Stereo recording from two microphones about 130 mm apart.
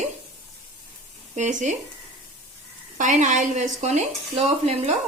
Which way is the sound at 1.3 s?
70° right (ahead or behind).